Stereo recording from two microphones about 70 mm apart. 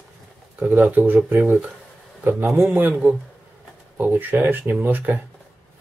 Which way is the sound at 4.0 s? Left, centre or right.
Right.